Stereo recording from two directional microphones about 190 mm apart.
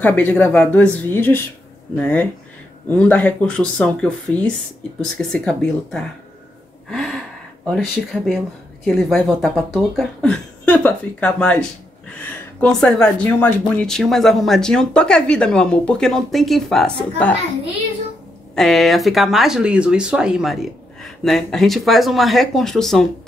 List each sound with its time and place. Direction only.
0.0 s speech: 10° left (ahead or behind)
6.9 s gasp: centre (ahead or behind)
7.7 s speech: centre (ahead or behind)
18.5 s speech: centre (ahead or behind)